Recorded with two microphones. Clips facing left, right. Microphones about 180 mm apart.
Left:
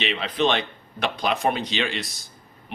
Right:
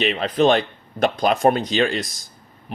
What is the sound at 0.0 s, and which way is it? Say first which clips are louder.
Speech: right 6 dB; 45° right (ahead or behind).